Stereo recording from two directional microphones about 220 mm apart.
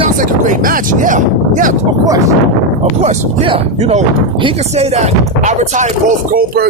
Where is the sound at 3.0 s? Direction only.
30° right (ahead or behind).